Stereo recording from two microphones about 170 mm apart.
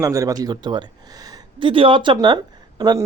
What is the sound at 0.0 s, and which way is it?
A man's voice, 20° right (ahead or behind).